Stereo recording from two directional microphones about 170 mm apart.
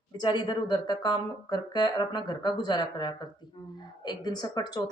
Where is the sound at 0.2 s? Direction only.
25° left (ahead or behind).